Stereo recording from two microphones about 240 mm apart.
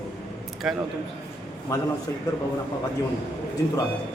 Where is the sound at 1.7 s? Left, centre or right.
Centre.